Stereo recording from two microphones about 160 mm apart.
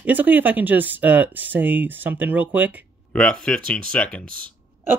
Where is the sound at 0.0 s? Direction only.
10° right (ahead or behind).